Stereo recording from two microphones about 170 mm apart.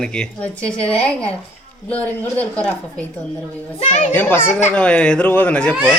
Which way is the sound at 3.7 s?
40° left (ahead or behind).